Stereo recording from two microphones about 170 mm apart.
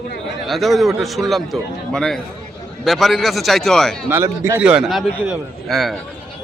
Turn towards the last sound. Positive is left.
turn(degrees=0)  # may be behind; listen again after turning